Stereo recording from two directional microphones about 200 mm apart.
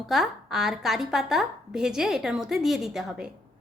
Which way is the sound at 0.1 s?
Centre (ahead or behind).